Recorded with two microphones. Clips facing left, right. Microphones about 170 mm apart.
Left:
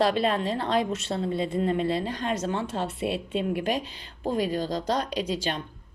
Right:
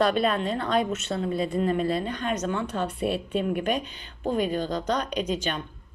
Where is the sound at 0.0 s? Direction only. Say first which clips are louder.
Right 1 dB; 25° left (ahead or behind).